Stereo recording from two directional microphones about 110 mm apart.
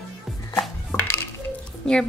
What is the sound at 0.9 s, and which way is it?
Dishes, 20° left (ahead or behind).